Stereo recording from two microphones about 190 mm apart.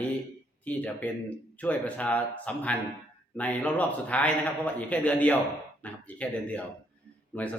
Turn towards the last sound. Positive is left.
turn(degrees=5)  # may be behind; listen again after turning